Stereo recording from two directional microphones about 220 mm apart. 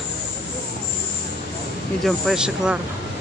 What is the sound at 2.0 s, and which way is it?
Speech, centre (ahead or behind).